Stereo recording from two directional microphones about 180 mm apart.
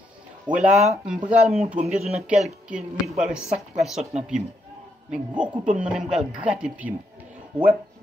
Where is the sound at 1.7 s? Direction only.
35° right (ahead or behind).